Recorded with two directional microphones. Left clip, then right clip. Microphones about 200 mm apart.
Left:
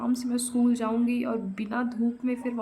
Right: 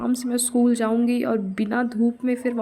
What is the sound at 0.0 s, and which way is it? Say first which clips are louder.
A woman's voice: right 4 dB; 25° right (ahead or behind).